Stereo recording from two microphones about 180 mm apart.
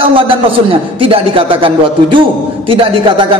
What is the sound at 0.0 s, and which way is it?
A man's voice, 30° right (ahead or behind).